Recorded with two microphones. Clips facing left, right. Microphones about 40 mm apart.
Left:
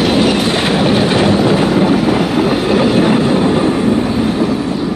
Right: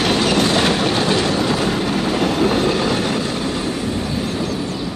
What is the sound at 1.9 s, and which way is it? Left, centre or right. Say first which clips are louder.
Train: left 5 dB; centre.